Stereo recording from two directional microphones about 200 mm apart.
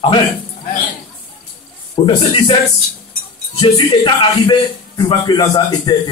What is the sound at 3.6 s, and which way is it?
A man's voice, 20° left (ahead or behind).